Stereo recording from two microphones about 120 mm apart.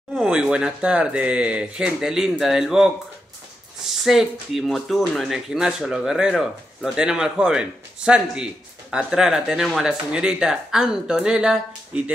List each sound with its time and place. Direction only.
0.1 s speech: 5° right (ahead or behind)
4.0 s speech: centre (ahead or behind)